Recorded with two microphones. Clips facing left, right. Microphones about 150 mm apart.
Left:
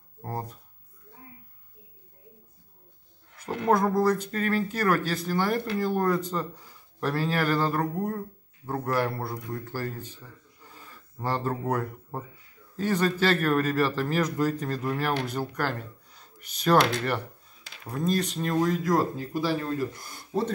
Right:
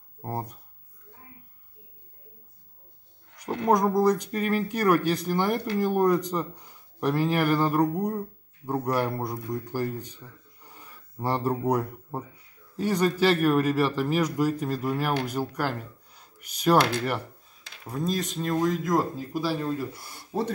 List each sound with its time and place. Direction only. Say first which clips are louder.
0.2 s speech: right 1 dB; 20° right (ahead or behind)
3.3 s speech: right 1 dB; 15° right (ahead or behind)